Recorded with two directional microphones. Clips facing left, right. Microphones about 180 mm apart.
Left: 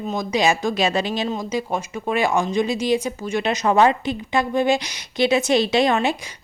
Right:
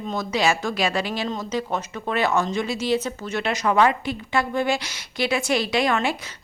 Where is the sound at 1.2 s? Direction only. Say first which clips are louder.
Left 2 dB; 10° left (ahead or behind).